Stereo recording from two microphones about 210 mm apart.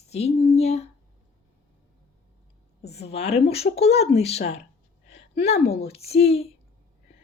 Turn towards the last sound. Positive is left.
turn(degrees=30)  # may be behind; listen again after turning